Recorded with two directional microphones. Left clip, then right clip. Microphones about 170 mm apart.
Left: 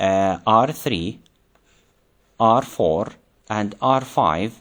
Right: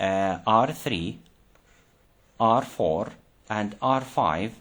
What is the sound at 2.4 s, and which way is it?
Speech, 30° left (ahead or behind).